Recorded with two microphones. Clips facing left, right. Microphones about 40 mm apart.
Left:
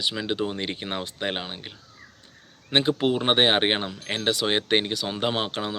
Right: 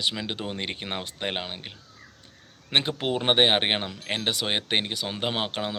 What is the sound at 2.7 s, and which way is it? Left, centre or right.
Speech, right.